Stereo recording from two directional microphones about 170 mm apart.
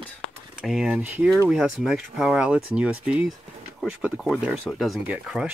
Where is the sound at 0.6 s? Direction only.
5° right (ahead or behind).